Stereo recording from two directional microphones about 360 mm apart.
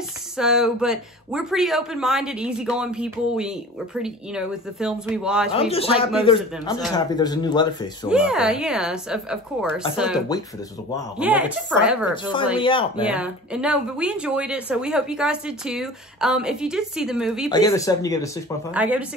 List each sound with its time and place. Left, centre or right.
0.4 s speech: centre
5.5 s speech: centre
7.1 s speech: centre
8.1 s speech: centre
12.5 s speech: centre
13.0 s speech: centre
17.5 s speech: centre
18.7 s speech: centre